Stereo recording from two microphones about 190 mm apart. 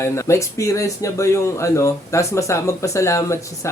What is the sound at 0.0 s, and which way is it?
Speech, 15° left (ahead or behind).